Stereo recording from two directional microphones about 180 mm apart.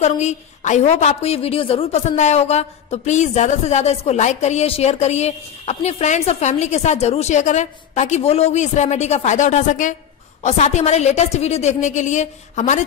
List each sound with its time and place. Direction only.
0.0 s a woman's voice: 40° left (ahead or behind)